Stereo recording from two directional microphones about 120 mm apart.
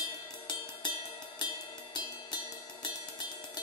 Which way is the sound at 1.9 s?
40° left (ahead or behind).